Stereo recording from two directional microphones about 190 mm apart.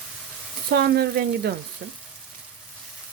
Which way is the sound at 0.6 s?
55° right (ahead or behind).